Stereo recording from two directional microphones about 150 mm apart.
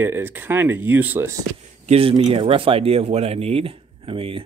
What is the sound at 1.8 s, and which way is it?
Speech, 40° right (ahead or behind).